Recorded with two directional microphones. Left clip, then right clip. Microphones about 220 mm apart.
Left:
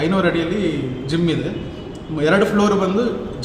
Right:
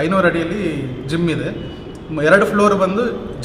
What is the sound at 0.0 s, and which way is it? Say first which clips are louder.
Speech: right 3 dB; centre (ahead or behind).